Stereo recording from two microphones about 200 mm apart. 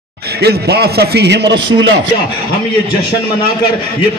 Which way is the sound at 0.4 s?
55° right (ahead or behind).